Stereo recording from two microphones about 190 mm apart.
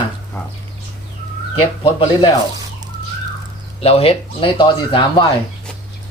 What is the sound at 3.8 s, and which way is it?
Speech, 30° left (ahead or behind).